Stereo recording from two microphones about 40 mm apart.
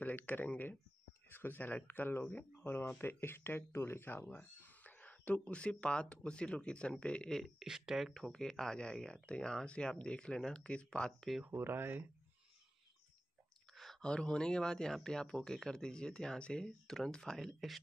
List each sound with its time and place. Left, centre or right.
0.0 s speech: left
2.6 s speech: left
3.0 s speech: left
4.4 s a sound: left
5.6 s speech: left
7.2 s speech: centre
7.6 s speech: centre
8.1 s speech: centre
11.5 s speech: right
14.0 s speech: left
16.6 s speech: centre
17.4 s speech: centre